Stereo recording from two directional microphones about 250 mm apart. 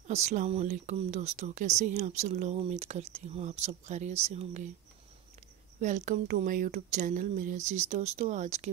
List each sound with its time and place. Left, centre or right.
0.0 s speech: right
5.8 s speech: right